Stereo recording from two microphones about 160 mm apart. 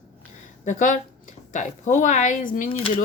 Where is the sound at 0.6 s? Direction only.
50° left (ahead or behind).